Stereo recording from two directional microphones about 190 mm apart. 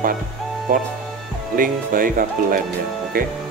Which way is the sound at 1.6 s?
45° right (ahead or behind).